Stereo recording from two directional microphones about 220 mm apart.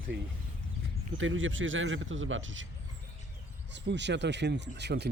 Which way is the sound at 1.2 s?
60° right (ahead or behind).